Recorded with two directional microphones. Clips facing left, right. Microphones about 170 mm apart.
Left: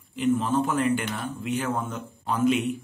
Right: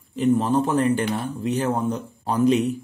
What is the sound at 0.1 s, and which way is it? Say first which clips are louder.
A man's voice: right 4 dB; 40° right (ahead or behind).